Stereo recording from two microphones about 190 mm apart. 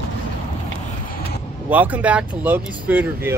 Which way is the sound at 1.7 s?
10° right (ahead or behind).